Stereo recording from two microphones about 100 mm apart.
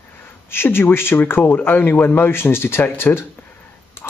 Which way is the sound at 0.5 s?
25° left (ahead or behind).